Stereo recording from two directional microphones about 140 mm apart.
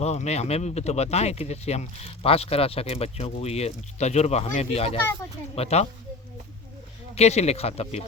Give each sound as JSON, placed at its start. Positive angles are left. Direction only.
{"t": 0.0, "sound": "speech", "side_deg": 50}
{"t": 7.2, "sound": "speech", "side_deg": 50}